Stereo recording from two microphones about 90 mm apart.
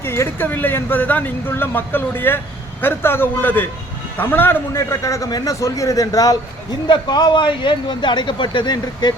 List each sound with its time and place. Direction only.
0.0 s a man's voice: 25° left (ahead or behind)
6.8 s speech: 55° left (ahead or behind)